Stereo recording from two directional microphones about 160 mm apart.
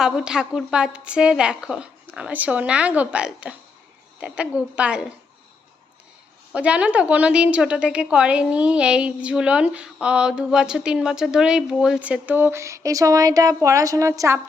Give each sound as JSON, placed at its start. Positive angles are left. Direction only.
{"t": 0.0, "sound": "a woman's voice", "side_deg": -5}
{"t": 6.5, "sound": "a woman's voice", "side_deg": -5}